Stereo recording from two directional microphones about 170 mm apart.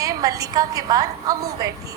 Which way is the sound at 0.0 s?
20° right (ahead or behind).